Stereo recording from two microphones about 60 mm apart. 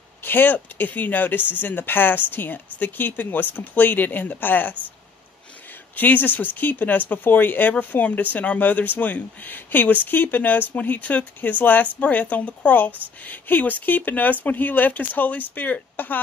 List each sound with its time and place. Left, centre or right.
0.2 s speech: left
5.9 s speech: left